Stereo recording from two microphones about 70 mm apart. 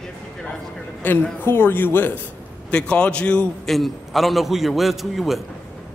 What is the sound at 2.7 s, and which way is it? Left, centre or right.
Speech, centre.